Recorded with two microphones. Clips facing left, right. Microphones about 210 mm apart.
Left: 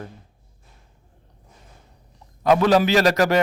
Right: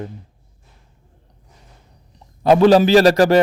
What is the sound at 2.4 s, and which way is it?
Speech, 30° right (ahead or behind).